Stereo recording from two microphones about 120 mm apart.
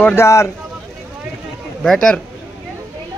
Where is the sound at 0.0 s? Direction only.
20° left (ahead or behind).